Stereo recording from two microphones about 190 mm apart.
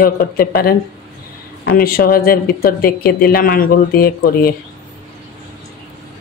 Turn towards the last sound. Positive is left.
turn(degrees=50)  # may be behind; listen again after turning